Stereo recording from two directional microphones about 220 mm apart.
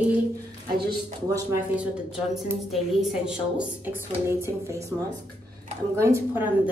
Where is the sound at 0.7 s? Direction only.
20° right (ahead or behind).